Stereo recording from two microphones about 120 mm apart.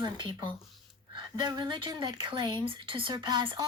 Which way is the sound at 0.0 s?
40° right (ahead or behind).